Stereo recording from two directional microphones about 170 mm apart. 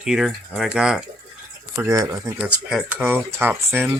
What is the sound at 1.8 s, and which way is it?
Speech, 15° right (ahead or behind).